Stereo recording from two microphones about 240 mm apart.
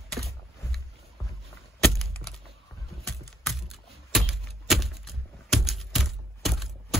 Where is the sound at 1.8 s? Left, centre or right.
Centre.